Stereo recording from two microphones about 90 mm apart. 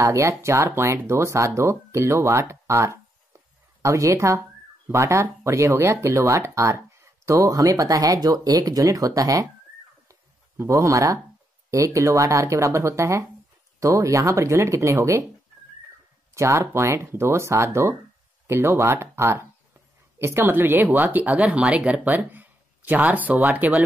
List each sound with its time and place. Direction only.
0.0 s speech: 35° right (ahead or behind)
10.6 s speech: 35° right (ahead or behind)
16.3 s speech: 30° right (ahead or behind)